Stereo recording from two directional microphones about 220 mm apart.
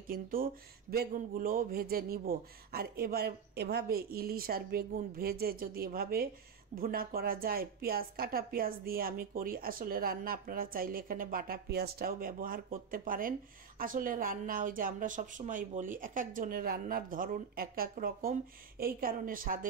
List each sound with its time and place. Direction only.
0.1 s a woman's voice: 40° right (ahead or behind)